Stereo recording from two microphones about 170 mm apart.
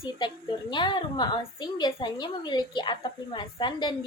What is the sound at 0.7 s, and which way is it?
A woman's voice, 25° left (ahead or behind).